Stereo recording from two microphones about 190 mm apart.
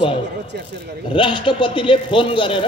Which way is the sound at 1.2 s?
25° left (ahead or behind).